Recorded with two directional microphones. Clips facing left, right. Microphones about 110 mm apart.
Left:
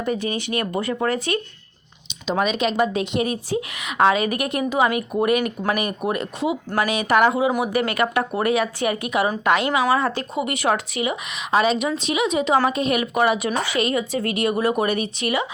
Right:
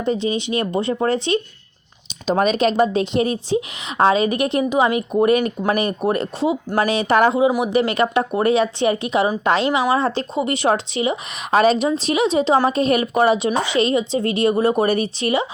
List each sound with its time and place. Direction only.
0.0 s a woman's voice: 25° right (ahead or behind)
2.2 s a woman's voice: 40° right (ahead or behind)
11.5 s a woman's voice: 40° right (ahead or behind)